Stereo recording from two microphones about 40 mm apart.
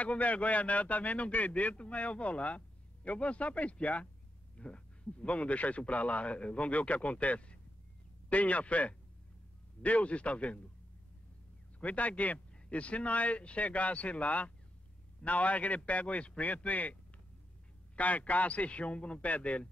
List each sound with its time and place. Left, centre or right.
0.0 s speech: left
11.8 s speech: left
17.9 s speech: left